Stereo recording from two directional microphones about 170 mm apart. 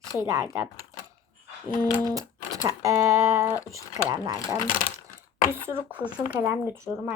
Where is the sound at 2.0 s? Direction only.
20° right (ahead or behind).